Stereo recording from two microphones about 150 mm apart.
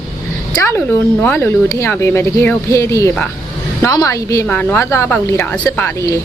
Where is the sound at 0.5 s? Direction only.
20° left (ahead or behind).